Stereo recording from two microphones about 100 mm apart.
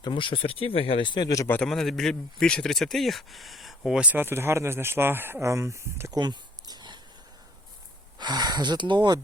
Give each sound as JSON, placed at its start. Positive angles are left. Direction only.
{"t": 0.0, "sound": "speech", "side_deg": 55}
{"t": 1.6, "sound": "speech", "side_deg": 5}
{"t": 6.1, "sound": "a sound", "side_deg": -45}
{"t": 8.2, "sound": "speech", "side_deg": -45}